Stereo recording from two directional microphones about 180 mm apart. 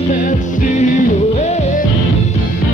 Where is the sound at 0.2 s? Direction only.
45° left (ahead or behind).